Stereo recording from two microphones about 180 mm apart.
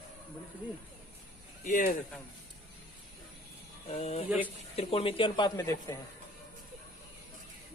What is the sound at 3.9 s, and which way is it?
Speech, 35° left (ahead or behind).